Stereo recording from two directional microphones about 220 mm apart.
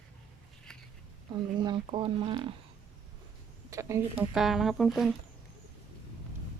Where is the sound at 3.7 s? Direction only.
15° right (ahead or behind).